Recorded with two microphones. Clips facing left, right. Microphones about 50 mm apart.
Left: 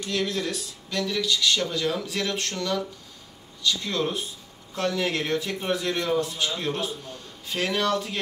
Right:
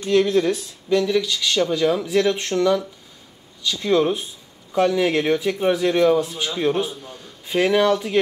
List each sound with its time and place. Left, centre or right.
0.0 s speech: right